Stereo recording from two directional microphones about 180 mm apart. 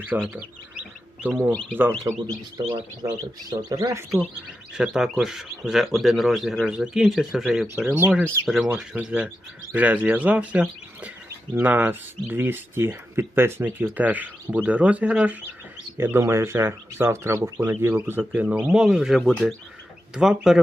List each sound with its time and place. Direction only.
0.0 s a man's voice: 10° right (ahead or behind)
4.8 s speech: 5° right (ahead or behind)